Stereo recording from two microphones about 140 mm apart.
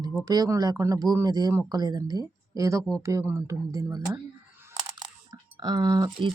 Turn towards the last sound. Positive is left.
turn(degrees=-30)  # may be behind; listen again after turning